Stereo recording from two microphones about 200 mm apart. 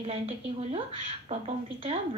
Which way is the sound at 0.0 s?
30° right (ahead or behind).